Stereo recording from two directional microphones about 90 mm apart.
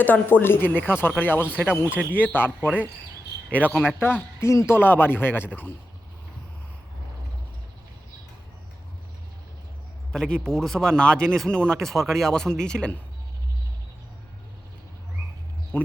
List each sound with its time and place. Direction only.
0.0 s speech: 20° left (ahead or behind)
2.0 s speech: 15° right (ahead or behind)
2.6 s speech: 20° left (ahead or behind)
10.1 s speech: 10° left (ahead or behind)